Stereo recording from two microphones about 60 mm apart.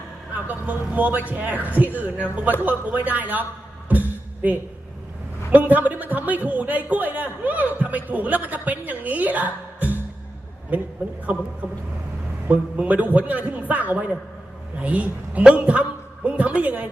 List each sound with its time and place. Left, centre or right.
0.4 s a man's voice: right
5.5 s a man's voice: right